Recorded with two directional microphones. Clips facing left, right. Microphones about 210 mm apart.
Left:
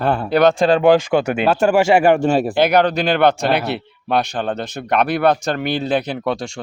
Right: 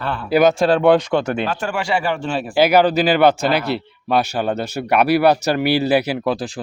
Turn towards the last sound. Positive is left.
turn(degrees=-5)  # may be behind; listen again after turning